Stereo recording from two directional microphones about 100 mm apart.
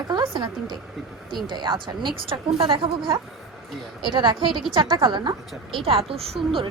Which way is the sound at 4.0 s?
55° right (ahead or behind).